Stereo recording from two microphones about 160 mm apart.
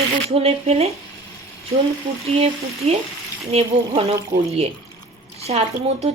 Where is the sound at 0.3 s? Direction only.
40° right (ahead or behind).